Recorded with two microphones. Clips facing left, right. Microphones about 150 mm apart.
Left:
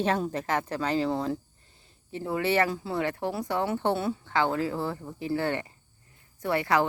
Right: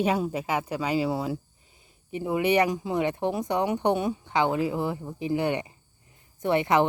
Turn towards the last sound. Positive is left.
turn(degrees=-20)  # may be behind; listen again after turning